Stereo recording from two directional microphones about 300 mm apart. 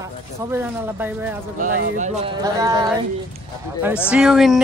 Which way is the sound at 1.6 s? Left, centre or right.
Right.